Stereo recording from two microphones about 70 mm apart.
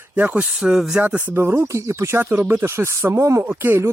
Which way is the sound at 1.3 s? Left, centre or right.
Right.